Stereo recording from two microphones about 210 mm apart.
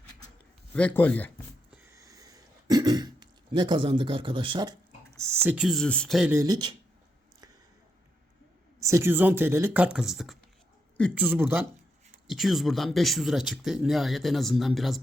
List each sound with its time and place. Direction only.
0.7 s speech: 5° left (ahead or behind)
1.9 s throat clearing: 15° right (ahead or behind)
5.4 s speech: 5° right (ahead or behind)
8.8 s speech: 15° right (ahead or behind)